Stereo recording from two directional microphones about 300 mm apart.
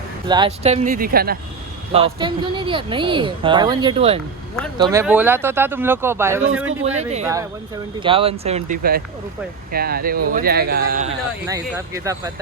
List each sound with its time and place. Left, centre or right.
0.3 s speech: centre
1.9 s speech: centre
6.8 s speech: right
11.4 s speech: centre